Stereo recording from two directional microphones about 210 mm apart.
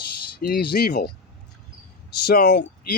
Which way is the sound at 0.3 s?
50° left (ahead or behind).